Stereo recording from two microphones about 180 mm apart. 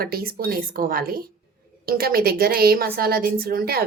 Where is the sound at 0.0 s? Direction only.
55° right (ahead or behind).